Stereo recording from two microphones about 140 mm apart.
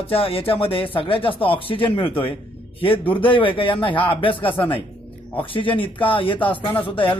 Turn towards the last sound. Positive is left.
turn(degrees=40)  # may be behind; listen again after turning